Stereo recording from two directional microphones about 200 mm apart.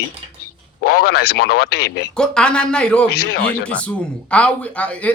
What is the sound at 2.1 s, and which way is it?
Speech, 5° left (ahead or behind).